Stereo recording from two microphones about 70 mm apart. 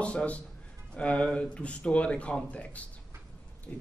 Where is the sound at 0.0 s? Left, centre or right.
Centre.